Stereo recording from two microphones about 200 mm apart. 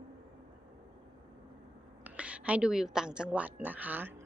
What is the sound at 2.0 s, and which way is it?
A woman's voice, 5° right (ahead or behind).